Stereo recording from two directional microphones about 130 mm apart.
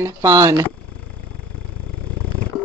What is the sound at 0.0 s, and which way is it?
Speech, 25° right (ahead or behind).